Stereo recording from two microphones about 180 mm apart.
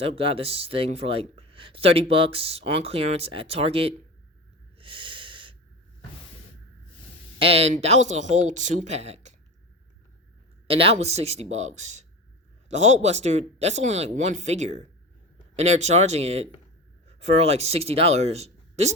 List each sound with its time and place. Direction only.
0.0 s speech: 30° right (ahead or behind)
4.8 s snort: 30° right (ahead or behind)
7.3 s speech: 30° right (ahead or behind)
10.7 s speech: 30° right (ahead or behind)